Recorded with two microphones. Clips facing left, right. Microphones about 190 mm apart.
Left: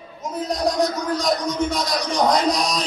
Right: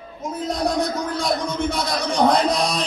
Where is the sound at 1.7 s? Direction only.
55° right (ahead or behind).